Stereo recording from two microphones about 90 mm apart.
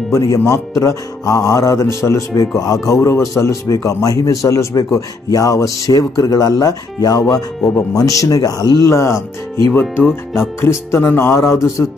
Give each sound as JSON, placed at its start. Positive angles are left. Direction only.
{"t": 0.1, "sound": "a man's voice", "side_deg": 35}
{"t": 9.7, "sound": "music", "side_deg": 25}
{"t": 11.1, "sound": "a man's voice", "side_deg": 25}